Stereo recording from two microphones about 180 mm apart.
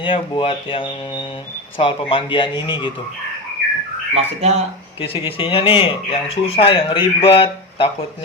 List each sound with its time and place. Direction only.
0.0 s speech: 30° left (ahead or behind)
4.1 s speech: 35° right (ahead or behind)
4.9 s speech: 30° left (ahead or behind)